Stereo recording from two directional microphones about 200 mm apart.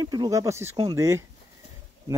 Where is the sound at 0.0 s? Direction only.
20° right (ahead or behind).